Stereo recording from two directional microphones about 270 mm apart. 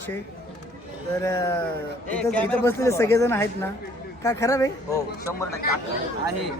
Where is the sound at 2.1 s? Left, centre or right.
Centre.